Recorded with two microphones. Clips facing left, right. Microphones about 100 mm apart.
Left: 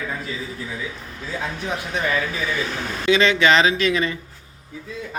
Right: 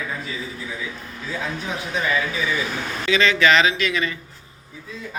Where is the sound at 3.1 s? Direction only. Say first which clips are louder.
Left 1 dB; 25° left (ahead or behind).